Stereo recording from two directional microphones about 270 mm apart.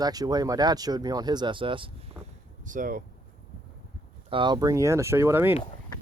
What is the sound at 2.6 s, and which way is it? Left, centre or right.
Speech, right.